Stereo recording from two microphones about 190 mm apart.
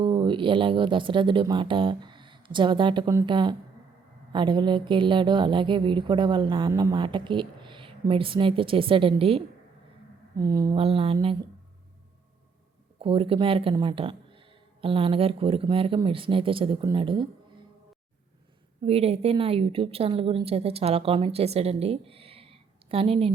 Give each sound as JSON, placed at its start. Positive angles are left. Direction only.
{"t": 0.0, "sound": "speech", "side_deg": -25}
{"t": 10.3, "sound": "speech", "side_deg": -20}
{"t": 10.8, "sound": "speech", "side_deg": -30}
{"t": 13.0, "sound": "speech", "side_deg": -30}
{"t": 18.9, "sound": "a woman's voice", "side_deg": -30}